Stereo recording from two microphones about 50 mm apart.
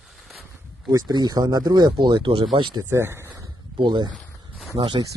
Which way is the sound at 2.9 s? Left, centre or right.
Right.